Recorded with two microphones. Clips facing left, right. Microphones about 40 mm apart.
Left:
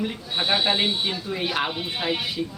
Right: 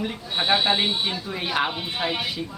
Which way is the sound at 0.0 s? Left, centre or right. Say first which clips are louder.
Even; centre.